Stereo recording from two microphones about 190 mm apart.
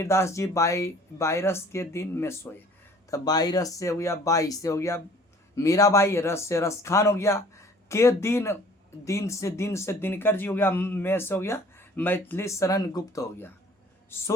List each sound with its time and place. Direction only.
0.0 s speech: 15° left (ahead or behind)